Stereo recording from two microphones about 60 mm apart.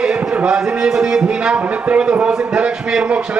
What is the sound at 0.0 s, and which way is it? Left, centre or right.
A man's voice, centre.